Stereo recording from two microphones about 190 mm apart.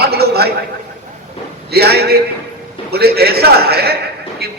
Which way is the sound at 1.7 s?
55° right (ahead or behind).